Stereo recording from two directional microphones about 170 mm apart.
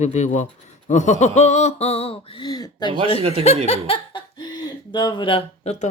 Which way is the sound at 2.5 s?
25° left (ahead or behind).